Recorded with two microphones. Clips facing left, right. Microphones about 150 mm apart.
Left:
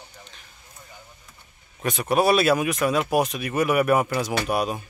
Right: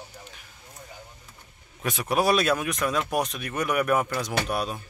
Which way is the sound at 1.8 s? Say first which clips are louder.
Left 3 dB; centre (ahead or behind).